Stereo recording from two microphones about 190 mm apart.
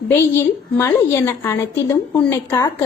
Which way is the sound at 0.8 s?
15° left (ahead or behind).